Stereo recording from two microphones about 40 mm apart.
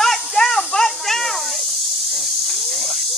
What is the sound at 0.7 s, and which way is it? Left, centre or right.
Snake, centre.